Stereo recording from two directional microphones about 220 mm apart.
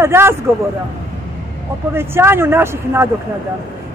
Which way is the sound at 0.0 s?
10° right (ahead or behind).